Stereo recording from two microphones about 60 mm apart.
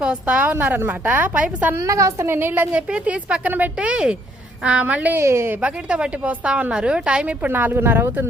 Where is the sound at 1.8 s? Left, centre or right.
Right.